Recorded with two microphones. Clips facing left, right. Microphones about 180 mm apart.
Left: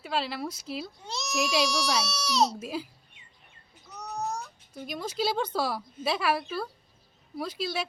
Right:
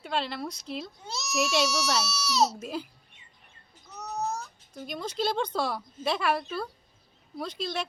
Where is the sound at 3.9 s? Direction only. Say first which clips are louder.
Right 1 dB; centre (ahead or behind).